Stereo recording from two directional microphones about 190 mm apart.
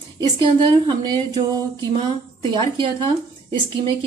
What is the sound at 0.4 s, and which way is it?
Speech, 25° right (ahead or behind).